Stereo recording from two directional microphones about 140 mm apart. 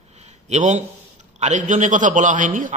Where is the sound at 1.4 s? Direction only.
60° right (ahead or behind).